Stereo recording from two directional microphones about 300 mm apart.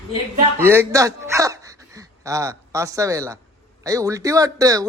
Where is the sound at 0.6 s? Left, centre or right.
Centre.